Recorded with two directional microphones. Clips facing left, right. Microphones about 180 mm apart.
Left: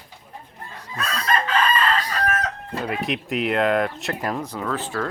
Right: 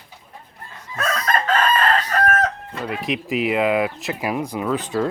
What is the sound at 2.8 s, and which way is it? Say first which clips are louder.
Speech: right 1 dB; centre (ahead or behind).